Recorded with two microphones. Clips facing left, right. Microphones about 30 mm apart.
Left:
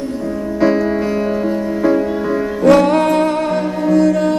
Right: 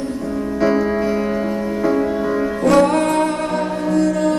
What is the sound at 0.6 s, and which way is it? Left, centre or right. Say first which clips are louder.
Music: left 2 dB; centre.